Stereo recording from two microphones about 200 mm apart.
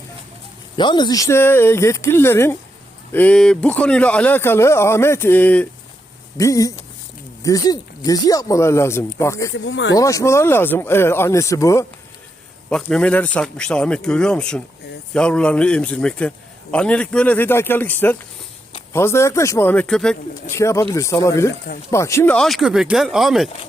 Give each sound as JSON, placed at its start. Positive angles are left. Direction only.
{"t": 0.8, "sound": "a man's voice", "side_deg": 20}
{"t": 9.5, "sound": "speech", "side_deg": 65}
{"t": 9.9, "sound": "a man's voice", "side_deg": 15}
{"t": 20.5, "sound": "a man's voice", "side_deg": 15}